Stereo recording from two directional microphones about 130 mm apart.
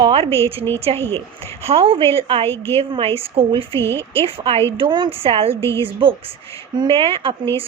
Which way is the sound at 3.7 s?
20° left (ahead or behind).